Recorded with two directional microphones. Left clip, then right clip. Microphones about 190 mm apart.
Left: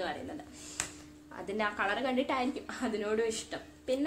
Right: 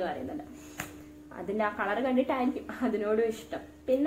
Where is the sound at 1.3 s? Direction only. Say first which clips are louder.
Right 3 dB; 15° left (ahead or behind).